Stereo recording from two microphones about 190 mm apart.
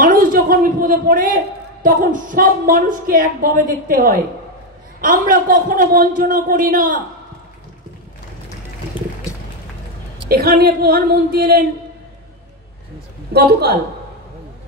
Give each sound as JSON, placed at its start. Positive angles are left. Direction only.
{"t": 0.0, "sound": "a man's voice", "side_deg": -50}
{"t": 10.3, "sound": "speech", "side_deg": -55}
{"t": 13.3, "sound": "speech", "side_deg": -60}